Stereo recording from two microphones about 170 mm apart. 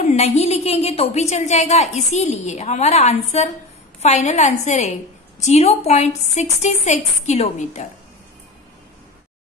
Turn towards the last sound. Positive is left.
turn(degrees=40)  # may be behind; listen again after turning